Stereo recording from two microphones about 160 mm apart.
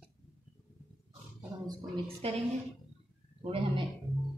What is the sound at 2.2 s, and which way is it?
A woman's voice, 40° right (ahead or behind).